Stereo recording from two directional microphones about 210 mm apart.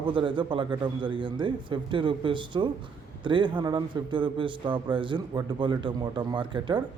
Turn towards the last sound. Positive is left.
turn(degrees=-25)  # may be behind; listen again after turning